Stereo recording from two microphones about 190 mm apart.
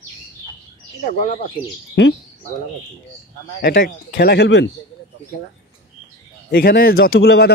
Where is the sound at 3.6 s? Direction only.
60° left (ahead or behind).